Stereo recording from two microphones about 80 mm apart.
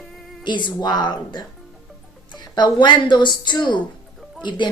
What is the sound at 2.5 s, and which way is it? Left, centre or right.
A woman's voice, left.